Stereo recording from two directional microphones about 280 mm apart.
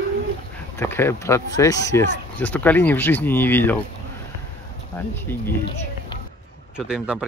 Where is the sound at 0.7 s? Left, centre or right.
Centre.